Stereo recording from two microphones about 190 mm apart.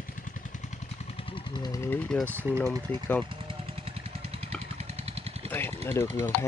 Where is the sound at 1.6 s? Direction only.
15° left (ahead or behind).